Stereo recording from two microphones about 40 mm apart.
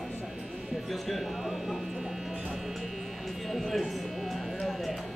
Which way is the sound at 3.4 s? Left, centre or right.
Centre.